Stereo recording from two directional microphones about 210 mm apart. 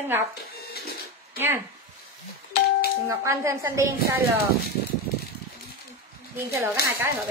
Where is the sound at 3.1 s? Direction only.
15° right (ahead or behind).